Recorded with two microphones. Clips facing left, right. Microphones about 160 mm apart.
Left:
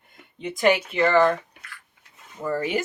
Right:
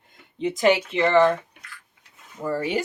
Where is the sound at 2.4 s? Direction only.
35° right (ahead or behind).